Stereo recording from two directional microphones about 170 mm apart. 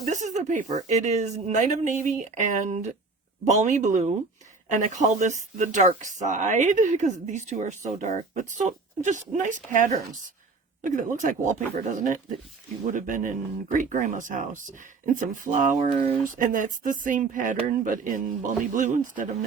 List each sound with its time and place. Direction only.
0.1 s speech: 45° right (ahead or behind)